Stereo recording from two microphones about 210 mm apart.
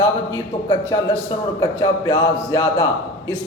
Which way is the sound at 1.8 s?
15° left (ahead or behind).